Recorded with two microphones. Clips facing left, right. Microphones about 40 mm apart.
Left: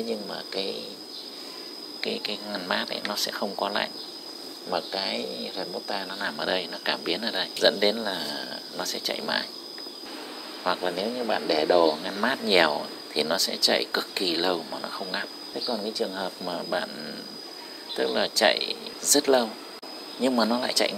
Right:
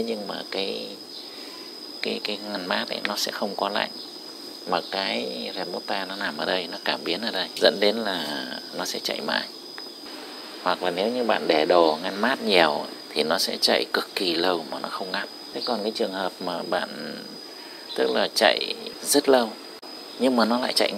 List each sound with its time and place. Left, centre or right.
0.0 s speech: right
2.0 s speech: centre
4.6 s speech: right
6.1 s speech: centre
8.1 s speech: right
8.8 s speech: centre
10.8 s speech: right; by 15.2 s centre
15.5 s speech: centre
15.8 s speech: right; by 19.5 s centre
20.6 s speech: centre